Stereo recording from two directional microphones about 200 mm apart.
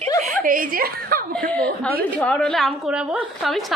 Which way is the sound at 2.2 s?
5° left (ahead or behind).